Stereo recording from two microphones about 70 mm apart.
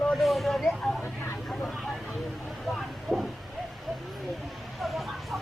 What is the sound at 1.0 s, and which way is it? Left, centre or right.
Vehicle, left.